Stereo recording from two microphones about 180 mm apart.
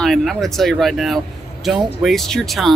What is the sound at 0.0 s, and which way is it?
Speech, centre (ahead or behind).